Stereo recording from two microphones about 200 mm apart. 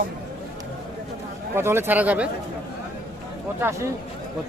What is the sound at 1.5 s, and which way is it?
Speech, 10° right (ahead or behind).